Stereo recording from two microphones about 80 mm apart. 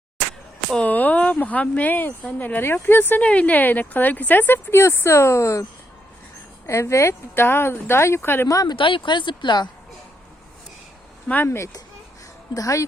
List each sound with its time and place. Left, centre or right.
0.7 s speech: centre; by 5.6 s left
6.7 s speech: left
8.4 s speech: left
8.7 s speech: left
11.4 s speech: left